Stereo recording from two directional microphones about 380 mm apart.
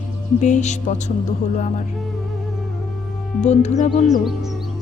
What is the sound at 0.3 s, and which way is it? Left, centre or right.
Music, centre.